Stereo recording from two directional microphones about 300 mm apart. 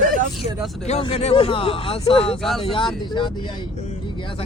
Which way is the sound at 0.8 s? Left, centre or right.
Left.